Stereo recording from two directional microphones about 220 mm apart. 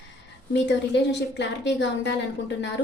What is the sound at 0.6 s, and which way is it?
A woman's voice, 55° left (ahead or behind).